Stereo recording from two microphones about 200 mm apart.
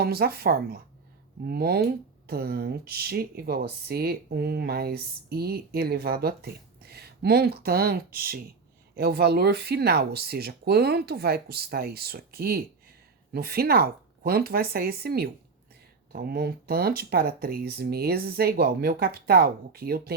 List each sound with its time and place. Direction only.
0.0 s speech: 50° right (ahead or behind)